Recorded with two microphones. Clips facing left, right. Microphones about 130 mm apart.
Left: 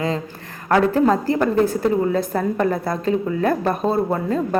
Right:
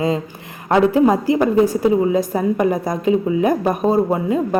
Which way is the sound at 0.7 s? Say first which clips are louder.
Right 2 dB; 15° right (ahead or behind).